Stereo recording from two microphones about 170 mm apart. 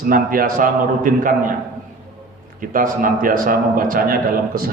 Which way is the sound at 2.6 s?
55° right (ahead or behind).